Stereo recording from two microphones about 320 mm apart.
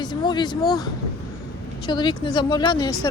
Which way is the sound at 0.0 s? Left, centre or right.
Centre.